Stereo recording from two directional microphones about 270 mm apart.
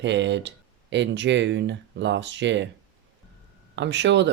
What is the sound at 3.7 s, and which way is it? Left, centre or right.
Speech, right.